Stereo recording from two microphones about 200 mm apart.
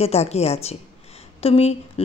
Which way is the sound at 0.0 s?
30° left (ahead or behind).